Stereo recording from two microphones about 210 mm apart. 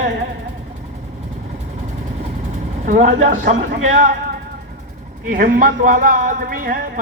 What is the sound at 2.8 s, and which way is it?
Speech, 35° right (ahead or behind).